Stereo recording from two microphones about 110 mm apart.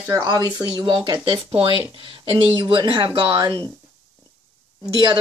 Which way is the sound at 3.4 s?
40° right (ahead or behind).